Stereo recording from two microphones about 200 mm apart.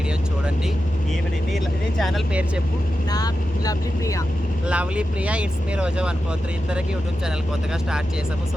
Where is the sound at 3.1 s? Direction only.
20° left (ahead or behind).